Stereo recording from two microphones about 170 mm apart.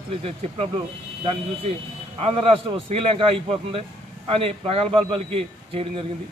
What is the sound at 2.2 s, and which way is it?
Speech, 35° right (ahead or behind).